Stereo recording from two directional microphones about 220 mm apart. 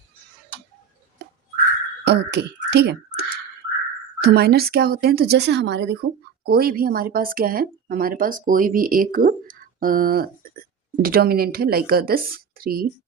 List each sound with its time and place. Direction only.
2.0 s a woman's voice: 50° right (ahead or behind)